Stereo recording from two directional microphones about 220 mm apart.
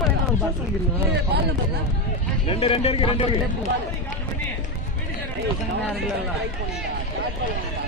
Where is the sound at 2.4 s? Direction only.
25° left (ahead or behind).